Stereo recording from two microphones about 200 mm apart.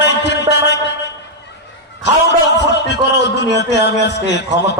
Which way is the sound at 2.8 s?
60° left (ahead or behind).